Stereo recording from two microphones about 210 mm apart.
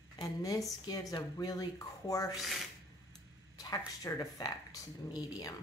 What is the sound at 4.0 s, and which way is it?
Speech, 15° left (ahead or behind).